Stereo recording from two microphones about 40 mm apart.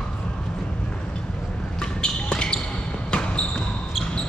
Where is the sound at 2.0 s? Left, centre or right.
Left.